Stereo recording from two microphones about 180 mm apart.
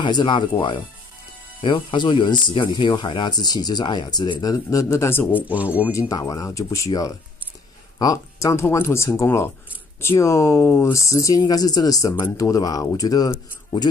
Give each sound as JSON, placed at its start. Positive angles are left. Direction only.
{"t": 0.0, "sound": "speech", "side_deg": 25}
{"t": 5.3, "sound": "speech", "side_deg": -10}
{"t": 5.9, "sound": "speech", "side_deg": 20}